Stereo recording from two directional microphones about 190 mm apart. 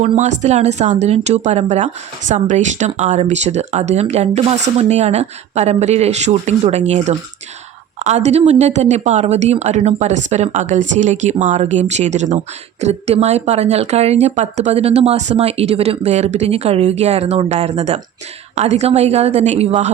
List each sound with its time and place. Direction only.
0.2 s speech: 35° right (ahead or behind)